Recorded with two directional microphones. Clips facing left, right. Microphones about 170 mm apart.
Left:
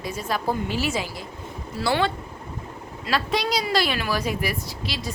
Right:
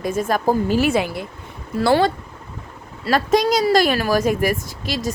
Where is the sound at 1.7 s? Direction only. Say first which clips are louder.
Right 7 dB; 45° right (ahead or behind).